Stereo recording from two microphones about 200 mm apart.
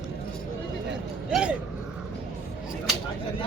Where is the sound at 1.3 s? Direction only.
5° right (ahead or behind).